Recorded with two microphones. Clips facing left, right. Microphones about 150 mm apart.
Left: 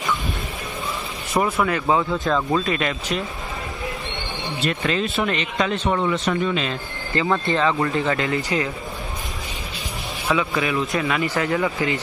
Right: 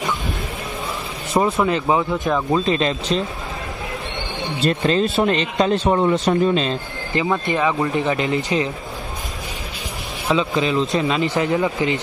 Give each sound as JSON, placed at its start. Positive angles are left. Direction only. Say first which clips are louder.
{"t": 1.3, "sound": "speech", "louder": "right 3 dB", "side_deg": -20}
{"t": 2.7, "sound": "speech", "louder": "right 4 dB", "side_deg": -25}
{"t": 4.6, "sound": "speech", "louder": "right 5 dB", "side_deg": -35}
{"t": 7.2, "sound": "speech", "louder": "even", "side_deg": -15}
{"t": 10.2, "sound": "speech", "louder": "right 3 dB", "side_deg": -20}